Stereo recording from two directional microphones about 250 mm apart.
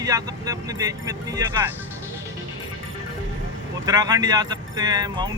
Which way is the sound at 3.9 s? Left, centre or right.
Centre.